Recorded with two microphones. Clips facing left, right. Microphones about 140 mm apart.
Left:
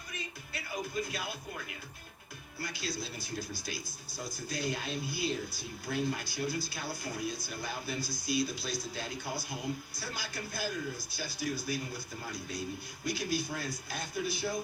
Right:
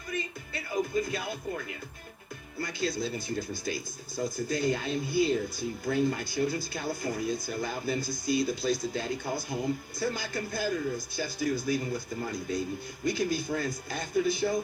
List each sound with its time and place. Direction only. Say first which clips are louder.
1.0 s speech: right 6 dB; 50° right (ahead or behind)